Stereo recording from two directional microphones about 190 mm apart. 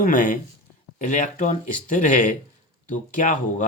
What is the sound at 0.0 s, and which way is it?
Speech, 45° left (ahead or behind).